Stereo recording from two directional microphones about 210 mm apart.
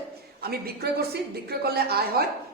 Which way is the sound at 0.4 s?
50° right (ahead or behind).